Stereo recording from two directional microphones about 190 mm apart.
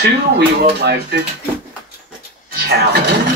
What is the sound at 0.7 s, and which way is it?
Speech, 60° right (ahead or behind).